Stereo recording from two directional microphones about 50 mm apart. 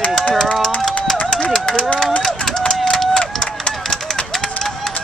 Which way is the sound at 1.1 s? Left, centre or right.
Centre.